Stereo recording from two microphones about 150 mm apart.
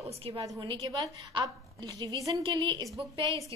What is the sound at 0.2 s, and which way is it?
A woman's voice, 40° right (ahead or behind).